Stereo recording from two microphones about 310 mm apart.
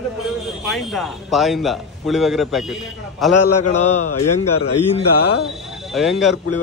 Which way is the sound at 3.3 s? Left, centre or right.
Left.